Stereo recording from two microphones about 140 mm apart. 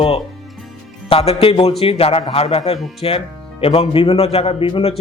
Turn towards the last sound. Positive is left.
turn(degrees=45)  # may be behind; listen again after turning